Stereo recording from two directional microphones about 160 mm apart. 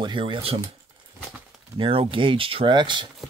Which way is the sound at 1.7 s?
35° right (ahead or behind).